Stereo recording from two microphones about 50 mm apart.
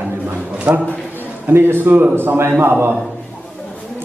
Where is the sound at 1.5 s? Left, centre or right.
Right.